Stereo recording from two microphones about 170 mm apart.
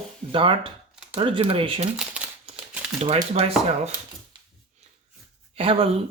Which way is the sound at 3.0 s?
35° right (ahead or behind).